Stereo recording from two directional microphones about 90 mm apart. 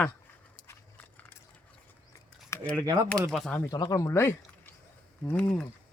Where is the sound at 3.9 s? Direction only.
35° left (ahead or behind).